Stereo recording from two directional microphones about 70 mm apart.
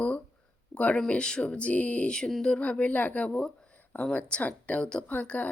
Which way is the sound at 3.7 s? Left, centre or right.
Left.